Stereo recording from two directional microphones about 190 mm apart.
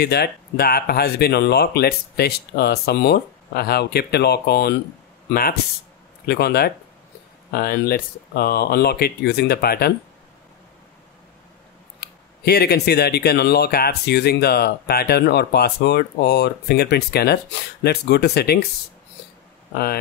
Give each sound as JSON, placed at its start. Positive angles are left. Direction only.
{"t": 0.0, "sound": "speech", "side_deg": 55}
{"t": 12.0, "sound": "speech", "side_deg": 55}
{"t": 19.7, "sound": "speech", "side_deg": 55}